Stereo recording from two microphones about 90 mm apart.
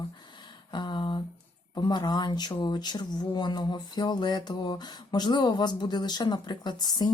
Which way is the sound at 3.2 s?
55° left (ahead or behind).